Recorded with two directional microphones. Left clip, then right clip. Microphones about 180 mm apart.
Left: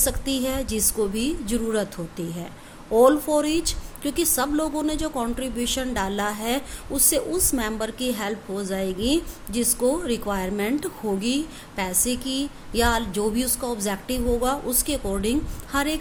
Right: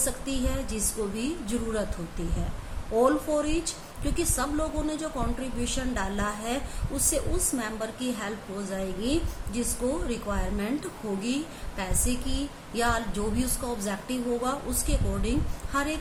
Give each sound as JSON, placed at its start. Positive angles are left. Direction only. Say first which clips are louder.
{"t": 0.0, "sound": "a woman's voice", "louder": "left 6 dB", "side_deg": 50}
{"t": 2.9, "sound": "a woman's voice", "louder": "left 6 dB", "side_deg": 50}